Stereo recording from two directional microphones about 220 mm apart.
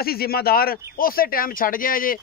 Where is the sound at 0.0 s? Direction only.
45° left (ahead or behind).